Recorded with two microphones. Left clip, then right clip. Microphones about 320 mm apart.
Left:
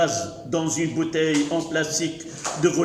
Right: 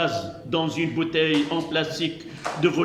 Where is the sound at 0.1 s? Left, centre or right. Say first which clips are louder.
Left 1 dB; centre.